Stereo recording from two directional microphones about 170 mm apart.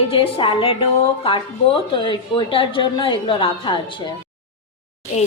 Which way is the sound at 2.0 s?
30° left (ahead or behind).